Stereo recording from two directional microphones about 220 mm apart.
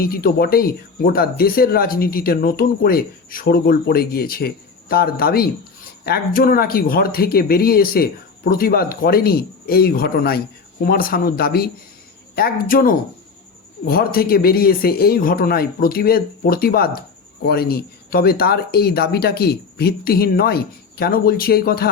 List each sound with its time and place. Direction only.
0.0 s a man's voice: 45° left (ahead or behind)